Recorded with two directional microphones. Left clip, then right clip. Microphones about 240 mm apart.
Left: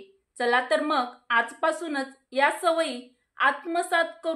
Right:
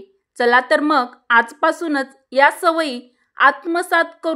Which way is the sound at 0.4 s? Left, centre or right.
Right.